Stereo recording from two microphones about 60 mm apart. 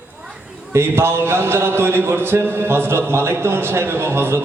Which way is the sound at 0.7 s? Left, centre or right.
Right.